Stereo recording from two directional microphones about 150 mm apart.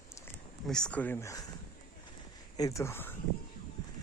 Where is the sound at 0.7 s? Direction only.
5° left (ahead or behind).